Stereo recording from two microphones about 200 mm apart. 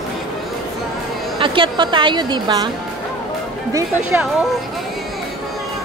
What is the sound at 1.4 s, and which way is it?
A woman's voice, 25° right (ahead or behind).